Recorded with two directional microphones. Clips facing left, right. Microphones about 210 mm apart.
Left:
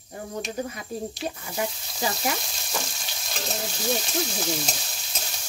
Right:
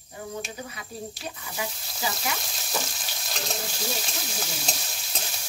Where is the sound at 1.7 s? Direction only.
Centre (ahead or behind).